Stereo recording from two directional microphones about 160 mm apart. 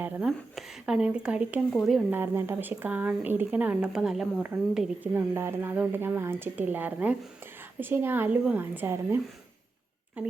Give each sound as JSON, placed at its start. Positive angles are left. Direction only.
{"t": 0.0, "sound": "speech", "side_deg": -10}
{"t": 5.1, "sound": "a woman's voice", "side_deg": -15}